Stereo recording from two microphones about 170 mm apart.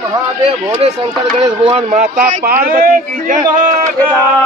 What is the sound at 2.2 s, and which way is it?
A man's voice, 55° right (ahead or behind).